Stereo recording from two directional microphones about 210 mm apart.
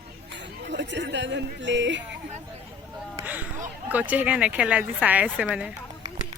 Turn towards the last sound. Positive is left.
turn(degrees=-5)  # may be behind; listen again after turning